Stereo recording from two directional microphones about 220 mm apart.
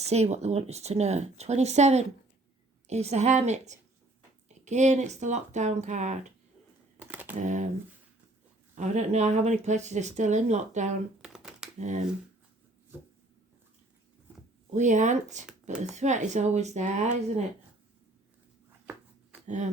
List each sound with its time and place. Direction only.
0.0 s speech: 30° right (ahead or behind)
7.0 s computer keyboard: 5° right (ahead or behind)
7.3 s speech: 35° right (ahead or behind)
8.7 s speech: 30° right (ahead or behind)
11.2 s shuffling cards: 5° right (ahead or behind)
14.7 s speech: 35° right (ahead or behind)
19.5 s speech: 35° right (ahead or behind)